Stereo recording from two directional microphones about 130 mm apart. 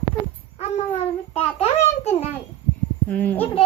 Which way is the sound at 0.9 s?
50° left (ahead or behind).